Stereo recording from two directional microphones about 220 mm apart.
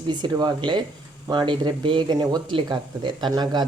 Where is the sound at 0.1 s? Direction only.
20° right (ahead or behind).